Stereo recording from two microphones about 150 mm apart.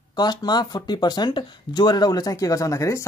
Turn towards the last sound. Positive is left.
turn(degrees=20)  # may be behind; listen again after turning